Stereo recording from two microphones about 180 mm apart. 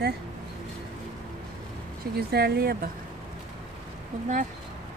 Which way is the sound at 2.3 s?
60° right (ahead or behind).